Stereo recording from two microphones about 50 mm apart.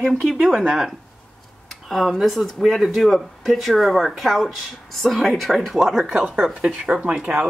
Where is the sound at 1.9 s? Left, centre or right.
Centre.